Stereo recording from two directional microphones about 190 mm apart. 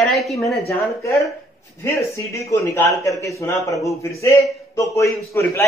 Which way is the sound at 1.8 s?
15° left (ahead or behind).